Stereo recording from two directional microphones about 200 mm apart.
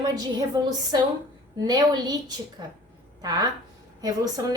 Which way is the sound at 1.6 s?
20° right (ahead or behind).